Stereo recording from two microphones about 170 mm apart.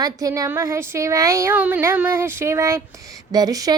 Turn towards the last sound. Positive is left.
turn(degrees=-20)  # may be behind; listen again after turning